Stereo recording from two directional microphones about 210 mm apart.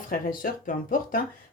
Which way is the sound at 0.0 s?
40° left (ahead or behind).